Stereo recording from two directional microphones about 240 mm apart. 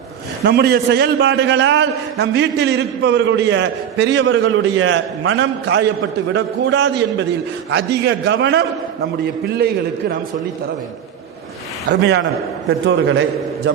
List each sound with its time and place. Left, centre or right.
0.4 s a man's voice: right
11.9 s a man's voice: right